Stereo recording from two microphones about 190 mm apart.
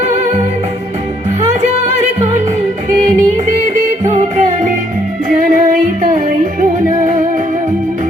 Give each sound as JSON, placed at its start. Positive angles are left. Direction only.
{"t": 0.0, "sound": "music", "side_deg": -35}
{"t": 1.4, "sound": "music", "side_deg": -35}